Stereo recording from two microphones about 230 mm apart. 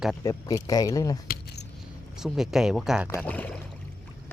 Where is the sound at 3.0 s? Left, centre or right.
Centre.